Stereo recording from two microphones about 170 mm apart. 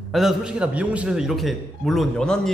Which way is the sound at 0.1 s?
Centre (ahead or behind).